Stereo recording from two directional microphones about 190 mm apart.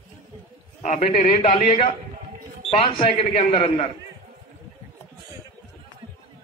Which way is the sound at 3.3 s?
30° left (ahead or behind).